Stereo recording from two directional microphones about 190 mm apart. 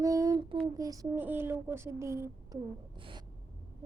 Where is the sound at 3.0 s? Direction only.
25° right (ahead or behind).